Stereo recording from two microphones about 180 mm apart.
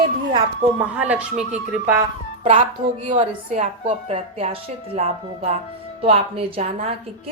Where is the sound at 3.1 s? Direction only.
35° right (ahead or behind).